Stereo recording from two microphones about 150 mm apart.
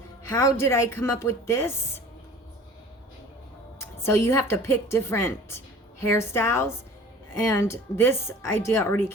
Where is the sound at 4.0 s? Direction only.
20° left (ahead or behind).